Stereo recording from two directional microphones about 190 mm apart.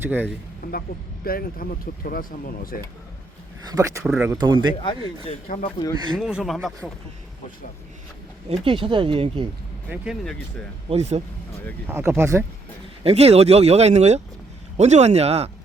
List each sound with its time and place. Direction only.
0.0 s speech: 10° right (ahead or behind)
1.2 s speech: 50° left (ahead or behind)
3.7 s speech: 15° right (ahead or behind)
4.0 s speech: 5° right (ahead or behind)
4.3 s speech: 25° right (ahead or behind)
4.8 s speech: 25° left (ahead or behind)
6.1 s speech: centre (ahead or behind)
8.4 s speech: 30° right (ahead or behind)
9.9 s speech: 5° right (ahead or behind)
10.8 s speech: 35° right (ahead or behind)
11.9 s speech: 10° right (ahead or behind)
13.0 s speech: 35° right (ahead or behind)